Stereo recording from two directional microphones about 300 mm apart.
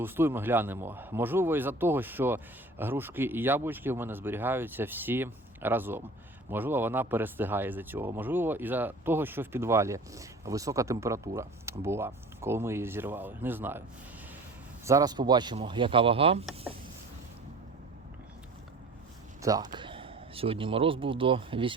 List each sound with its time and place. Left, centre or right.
0.0 s speech: centre
14.8 s speech: centre
19.4 s speech: centre